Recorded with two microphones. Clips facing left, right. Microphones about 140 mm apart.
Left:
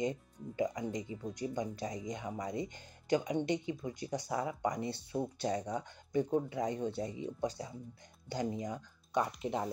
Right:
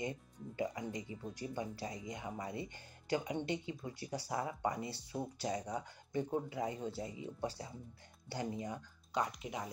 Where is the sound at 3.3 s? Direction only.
20° left (ahead or behind).